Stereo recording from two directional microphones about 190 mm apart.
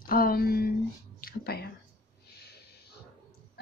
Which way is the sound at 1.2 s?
55° left (ahead or behind).